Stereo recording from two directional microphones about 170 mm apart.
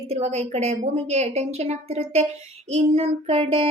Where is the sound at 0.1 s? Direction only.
40° right (ahead or behind).